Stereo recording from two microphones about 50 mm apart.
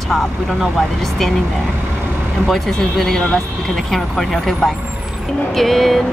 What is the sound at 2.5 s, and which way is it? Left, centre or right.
Speech, centre.